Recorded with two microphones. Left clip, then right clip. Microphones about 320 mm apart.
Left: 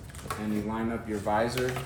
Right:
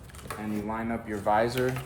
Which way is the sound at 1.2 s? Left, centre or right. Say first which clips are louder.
Right 3 dB; centre.